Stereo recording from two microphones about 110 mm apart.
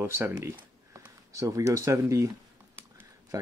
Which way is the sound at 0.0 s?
25° right (ahead or behind).